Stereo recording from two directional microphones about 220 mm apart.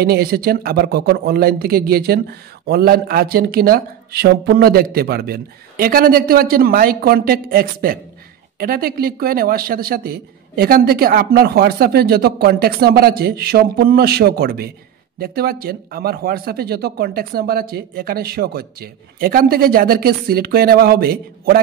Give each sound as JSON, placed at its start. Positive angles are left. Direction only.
{"t": 0.0, "sound": "speech", "side_deg": -45}